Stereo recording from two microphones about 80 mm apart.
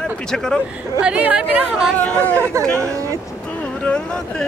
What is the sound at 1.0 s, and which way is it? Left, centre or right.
Speech, centre.